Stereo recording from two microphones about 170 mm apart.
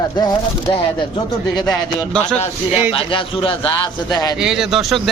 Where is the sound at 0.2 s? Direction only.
25° left (ahead or behind).